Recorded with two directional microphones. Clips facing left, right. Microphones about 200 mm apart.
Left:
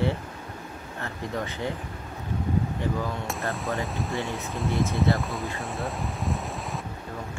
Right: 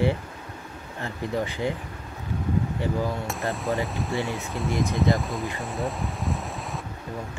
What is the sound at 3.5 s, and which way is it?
Speech, centre (ahead or behind).